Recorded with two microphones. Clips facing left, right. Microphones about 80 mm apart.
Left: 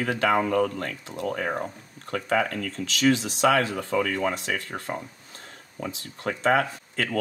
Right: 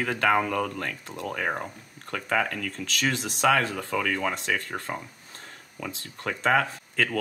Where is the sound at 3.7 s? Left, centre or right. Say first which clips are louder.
Left 2 dB; left.